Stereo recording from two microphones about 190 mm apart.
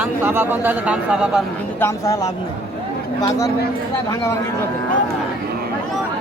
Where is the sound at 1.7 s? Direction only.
15° left (ahead or behind).